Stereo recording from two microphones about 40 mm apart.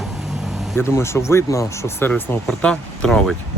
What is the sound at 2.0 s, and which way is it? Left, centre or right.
Speech, left.